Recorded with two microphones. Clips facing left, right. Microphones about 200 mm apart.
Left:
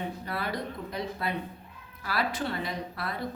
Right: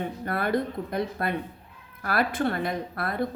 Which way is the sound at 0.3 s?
55° right (ahead or behind).